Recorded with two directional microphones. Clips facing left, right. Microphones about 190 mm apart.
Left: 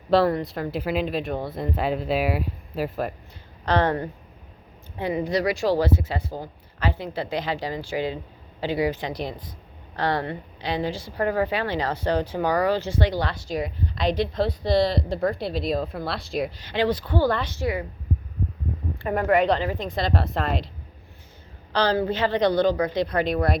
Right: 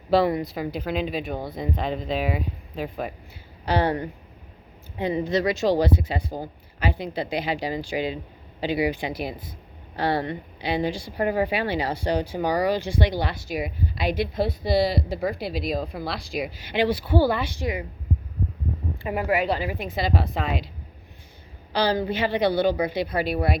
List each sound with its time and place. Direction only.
0.1 s speech: 5° right (ahead or behind)
3.7 s speech: 10° right (ahead or behind)
5.2 s speech: 25° right (ahead or behind); by 16.6 s centre (ahead or behind)
16.6 s speech: 10° right (ahead or behind)
19.0 s speech: 10° right (ahead or behind)
21.7 s speech: 10° right (ahead or behind)